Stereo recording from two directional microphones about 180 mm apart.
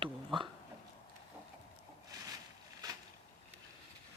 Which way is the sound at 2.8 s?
20° right (ahead or behind).